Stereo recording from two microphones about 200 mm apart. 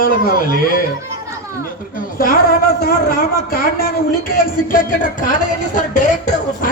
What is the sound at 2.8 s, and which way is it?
A man's voice, 45° left (ahead or behind).